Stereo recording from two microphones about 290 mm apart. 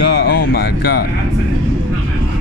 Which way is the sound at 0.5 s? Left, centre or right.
Left.